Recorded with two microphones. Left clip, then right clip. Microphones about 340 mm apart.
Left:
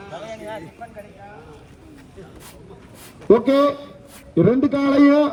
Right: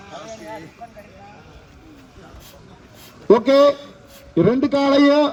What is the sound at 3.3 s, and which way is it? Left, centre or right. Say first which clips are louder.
A man's voice: right 2 dB; right.